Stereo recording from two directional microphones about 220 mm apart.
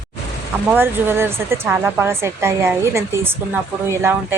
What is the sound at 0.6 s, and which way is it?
Speech, 10° right (ahead or behind).